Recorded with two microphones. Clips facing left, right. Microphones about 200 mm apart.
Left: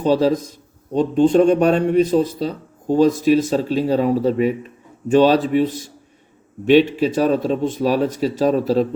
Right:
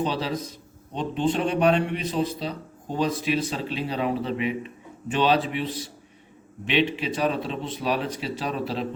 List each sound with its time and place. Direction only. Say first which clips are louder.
0.0 s a man's voice: left 11 dB; 45° left (ahead or behind)